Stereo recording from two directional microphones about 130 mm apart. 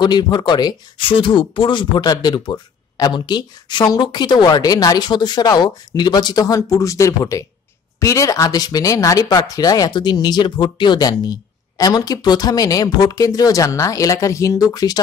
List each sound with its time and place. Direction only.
0.0 s speech: 35° left (ahead or behind)